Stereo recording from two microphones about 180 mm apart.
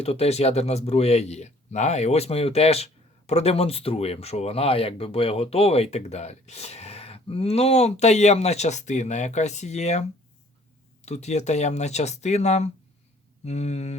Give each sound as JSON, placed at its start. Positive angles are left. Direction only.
{"t": 0.0, "sound": "speech", "side_deg": 35}